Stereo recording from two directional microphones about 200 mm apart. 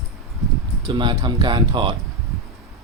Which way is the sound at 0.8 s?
20° right (ahead or behind).